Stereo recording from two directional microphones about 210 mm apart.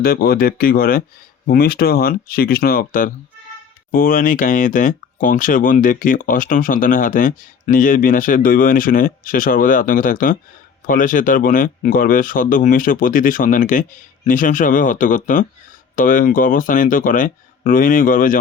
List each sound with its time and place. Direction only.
0.0 s speech: 45° left (ahead or behind)